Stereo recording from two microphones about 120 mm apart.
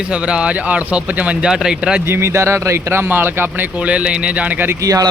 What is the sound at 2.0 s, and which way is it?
Speech, 20° right (ahead or behind).